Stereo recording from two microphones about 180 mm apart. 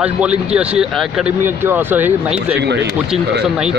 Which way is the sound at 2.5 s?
70° right (ahead or behind).